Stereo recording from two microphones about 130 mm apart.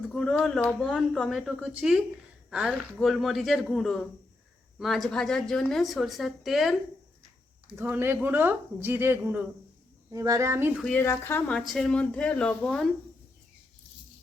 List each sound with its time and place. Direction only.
0.1 s a woman's voice: 5° left (ahead or behind)
7.8 s speech: 15° right (ahead or behind)
10.1 s speech: 25° right (ahead or behind)
10.9 s speech: 20° left (ahead or behind)